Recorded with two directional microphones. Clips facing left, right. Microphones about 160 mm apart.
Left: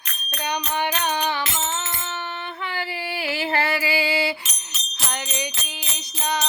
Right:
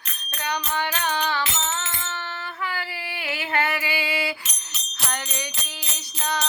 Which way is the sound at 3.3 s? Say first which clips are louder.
Left 2 dB; 30° left (ahead or behind).